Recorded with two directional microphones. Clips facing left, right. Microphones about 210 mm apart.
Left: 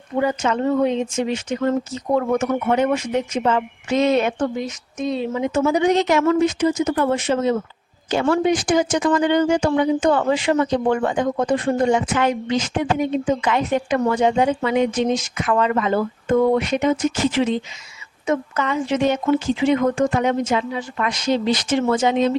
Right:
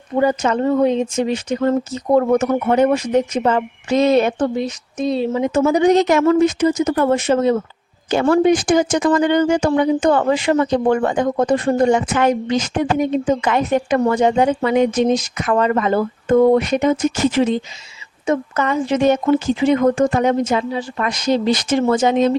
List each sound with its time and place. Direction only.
0.2 s a woman's voice: 40° right (ahead or behind)